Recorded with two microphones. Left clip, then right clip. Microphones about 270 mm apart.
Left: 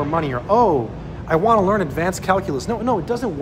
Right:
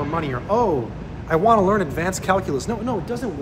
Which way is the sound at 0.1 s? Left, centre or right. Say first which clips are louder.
Left 4 dB; centre.